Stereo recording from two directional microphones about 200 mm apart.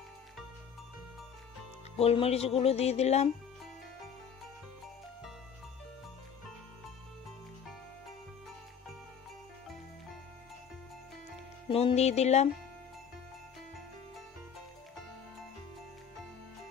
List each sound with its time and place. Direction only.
2.0 s speech: 30° left (ahead or behind)
11.7 s speech: 30° left (ahead or behind)